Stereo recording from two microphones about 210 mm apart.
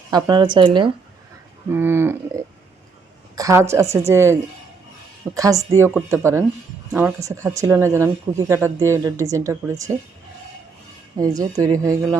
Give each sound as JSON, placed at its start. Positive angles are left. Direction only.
{"t": 0.1, "sound": "a woman's voice", "side_deg": -20}
{"t": 1.7, "sound": "speech", "side_deg": -10}
{"t": 11.2, "sound": "speech", "side_deg": -15}